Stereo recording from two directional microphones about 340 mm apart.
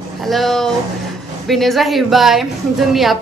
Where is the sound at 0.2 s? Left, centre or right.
Centre.